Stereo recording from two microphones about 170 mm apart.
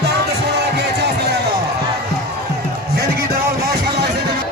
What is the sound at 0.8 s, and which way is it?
Music, 80° right.